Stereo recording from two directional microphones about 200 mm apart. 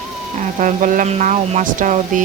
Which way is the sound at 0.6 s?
40° right (ahead or behind).